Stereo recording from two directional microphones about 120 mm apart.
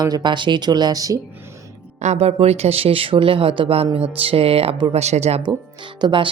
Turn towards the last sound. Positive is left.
turn(degrees=-45)  # may be behind; listen again after turning